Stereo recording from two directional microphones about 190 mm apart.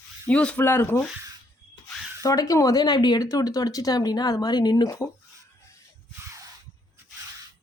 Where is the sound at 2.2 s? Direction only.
15° left (ahead or behind).